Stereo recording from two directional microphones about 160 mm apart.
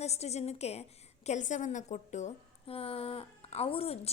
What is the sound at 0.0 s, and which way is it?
A woman's voice, 40° left (ahead or behind).